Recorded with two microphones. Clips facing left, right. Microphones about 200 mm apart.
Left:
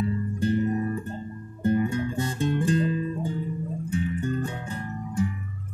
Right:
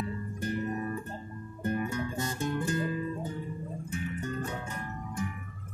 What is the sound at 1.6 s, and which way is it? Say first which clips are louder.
Music: left 8 dB; 25° left (ahead or behind).